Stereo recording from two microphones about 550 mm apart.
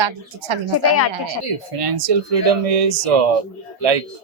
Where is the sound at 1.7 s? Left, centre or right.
Right.